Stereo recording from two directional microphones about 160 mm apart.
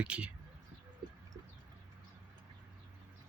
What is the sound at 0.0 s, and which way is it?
Speech, 5° right (ahead or behind).